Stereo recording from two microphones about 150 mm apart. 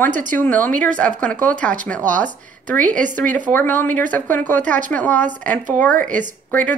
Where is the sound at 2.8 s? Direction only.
60° right (ahead or behind).